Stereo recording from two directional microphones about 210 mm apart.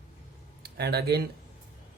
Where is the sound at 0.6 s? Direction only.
50° right (ahead or behind).